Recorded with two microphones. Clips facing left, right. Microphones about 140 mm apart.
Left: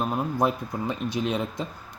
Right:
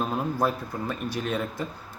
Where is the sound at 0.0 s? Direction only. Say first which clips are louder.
Left 1 dB; 15° left (ahead or behind).